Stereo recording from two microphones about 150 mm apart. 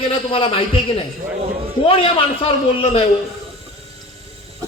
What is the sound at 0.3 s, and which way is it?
Speech, 35° left (ahead or behind).